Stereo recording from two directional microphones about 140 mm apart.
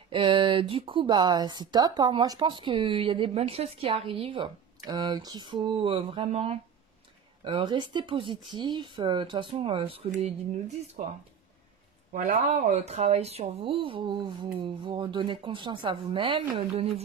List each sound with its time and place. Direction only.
0.1 s speech: 40° right (ahead or behind)
7.4 s speech: 35° right (ahead or behind)
11.0 s speech: 65° right (ahead or behind); by 17.0 s 45° right (ahead or behind)